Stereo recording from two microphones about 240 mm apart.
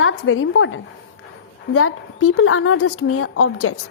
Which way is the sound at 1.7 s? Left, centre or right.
Left.